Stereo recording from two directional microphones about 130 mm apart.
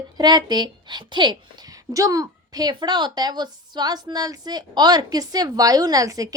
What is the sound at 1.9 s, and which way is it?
A woman's voice, 25° right (ahead or behind).